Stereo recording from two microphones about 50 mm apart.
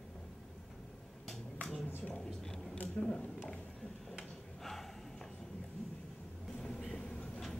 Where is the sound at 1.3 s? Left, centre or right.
Centre.